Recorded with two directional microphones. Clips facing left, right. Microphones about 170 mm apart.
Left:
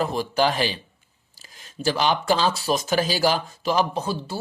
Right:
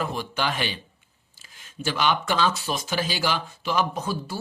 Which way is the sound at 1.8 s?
35° left (ahead or behind).